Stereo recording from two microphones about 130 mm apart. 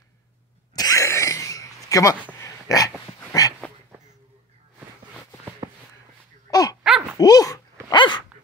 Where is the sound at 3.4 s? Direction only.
25° left (ahead or behind).